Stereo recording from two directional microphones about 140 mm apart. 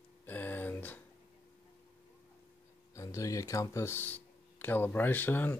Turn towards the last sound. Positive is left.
turn(degrees=15)  # may be behind; listen again after turning